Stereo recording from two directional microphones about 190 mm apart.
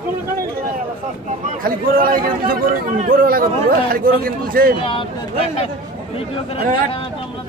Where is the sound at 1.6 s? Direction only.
50° right (ahead or behind).